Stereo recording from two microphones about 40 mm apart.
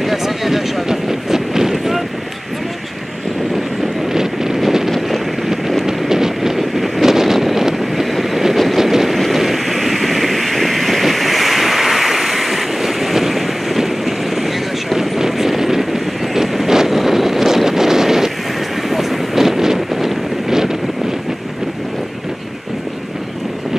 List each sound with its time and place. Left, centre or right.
0.0 s vehicle: centre
4.1 s wind noise: centre
5.5 s a sound: centre
5.9 s wind noise: centre
8.9 s vehicle: centre
18.9 s wind noise: centre